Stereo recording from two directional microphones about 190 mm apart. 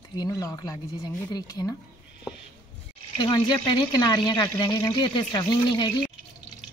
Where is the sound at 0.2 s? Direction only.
20° left (ahead or behind).